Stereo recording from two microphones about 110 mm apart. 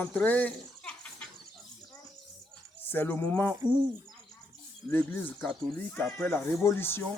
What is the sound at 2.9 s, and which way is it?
Speech, 20° left (ahead or behind).